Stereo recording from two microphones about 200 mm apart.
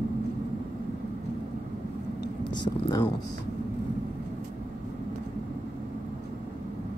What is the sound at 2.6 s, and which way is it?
Speech, 20° left (ahead or behind).